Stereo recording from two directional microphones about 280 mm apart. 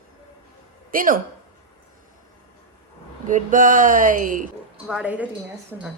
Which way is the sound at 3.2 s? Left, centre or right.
Right.